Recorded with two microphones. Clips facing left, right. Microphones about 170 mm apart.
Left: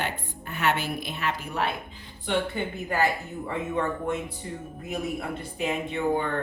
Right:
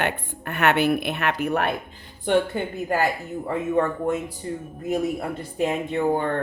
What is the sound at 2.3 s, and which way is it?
Speech, 50° right (ahead or behind).